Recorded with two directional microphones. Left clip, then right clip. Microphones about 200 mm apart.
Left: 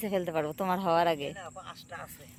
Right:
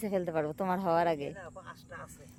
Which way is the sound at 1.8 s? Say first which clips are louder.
Left 4 dB; 55° right (ahead or behind).